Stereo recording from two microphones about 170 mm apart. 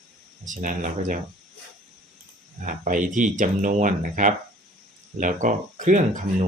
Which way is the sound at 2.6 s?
50° right (ahead or behind).